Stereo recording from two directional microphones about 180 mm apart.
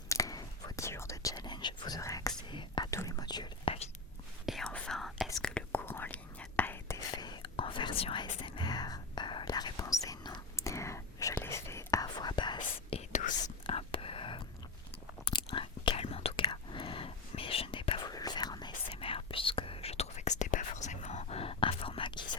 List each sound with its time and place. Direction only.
0.1 s whispering: 20° left (ahead or behind)
4.4 s whispering: centre (ahead or behind); by 12.5 s 25° left (ahead or behind)
12.5 s whispering: 40° left (ahead or behind)
13.7 s whispering: 30° left (ahead or behind)